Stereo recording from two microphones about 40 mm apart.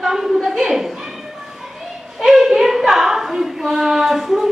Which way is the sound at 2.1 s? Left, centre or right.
Centre.